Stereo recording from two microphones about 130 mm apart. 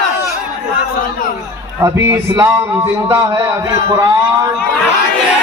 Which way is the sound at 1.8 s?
20° right (ahead or behind).